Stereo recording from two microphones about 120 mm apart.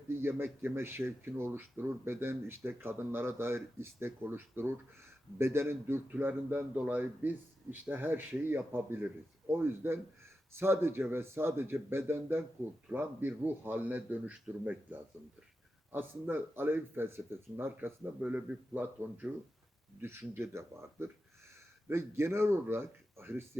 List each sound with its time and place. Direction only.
0.2 s speech: 20° right (ahead or behind)